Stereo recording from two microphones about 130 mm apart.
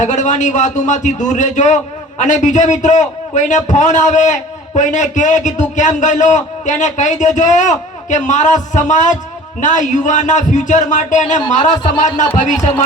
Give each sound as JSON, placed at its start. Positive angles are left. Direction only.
{"t": 0.0, "sound": "a man's voice", "side_deg": 70}
{"t": 11.3, "sound": "speech", "side_deg": 30}
{"t": 11.9, "sound": "a man's voice", "side_deg": 70}